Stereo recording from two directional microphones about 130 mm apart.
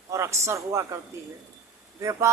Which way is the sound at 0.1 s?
25° right (ahead or behind).